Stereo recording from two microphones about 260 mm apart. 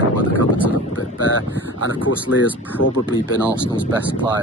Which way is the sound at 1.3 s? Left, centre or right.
Left.